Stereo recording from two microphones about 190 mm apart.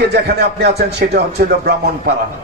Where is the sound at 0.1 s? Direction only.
60° right (ahead or behind).